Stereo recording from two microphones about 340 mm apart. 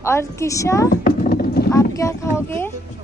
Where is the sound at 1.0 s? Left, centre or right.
Left.